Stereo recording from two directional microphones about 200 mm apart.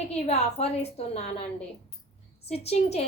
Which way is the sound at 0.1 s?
30° left (ahead or behind).